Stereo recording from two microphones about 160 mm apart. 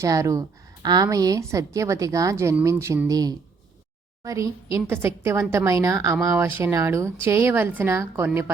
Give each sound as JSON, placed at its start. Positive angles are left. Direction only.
{"t": 0.0, "sound": "a woman's voice", "side_deg": -20}